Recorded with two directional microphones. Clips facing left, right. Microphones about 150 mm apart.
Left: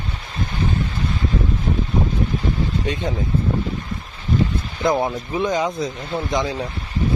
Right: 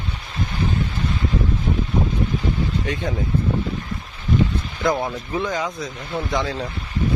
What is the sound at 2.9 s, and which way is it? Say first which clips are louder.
Speech: left 2 dB; 20° left (ahead or behind).